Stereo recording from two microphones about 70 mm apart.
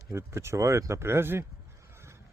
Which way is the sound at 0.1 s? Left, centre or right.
Right.